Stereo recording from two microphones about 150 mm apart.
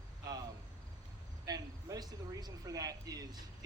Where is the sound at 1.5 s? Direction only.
25° right (ahead or behind).